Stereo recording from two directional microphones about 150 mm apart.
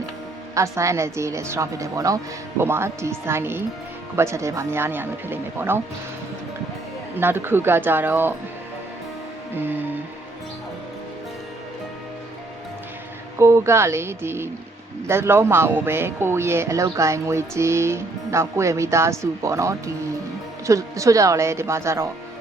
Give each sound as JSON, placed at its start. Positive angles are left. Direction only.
{"t": 0.5, "sound": "speech", "side_deg": -20}
{"t": 7.2, "sound": "speech", "side_deg": -15}
{"t": 13.4, "sound": "speech", "side_deg": -20}